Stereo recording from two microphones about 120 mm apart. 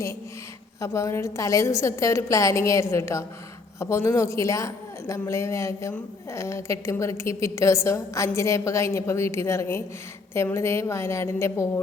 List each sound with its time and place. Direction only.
0.8 s a woman's voice: 25° left (ahead or behind)